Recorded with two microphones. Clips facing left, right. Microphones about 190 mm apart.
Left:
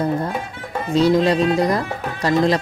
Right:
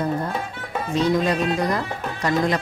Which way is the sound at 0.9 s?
35° left (ahead or behind).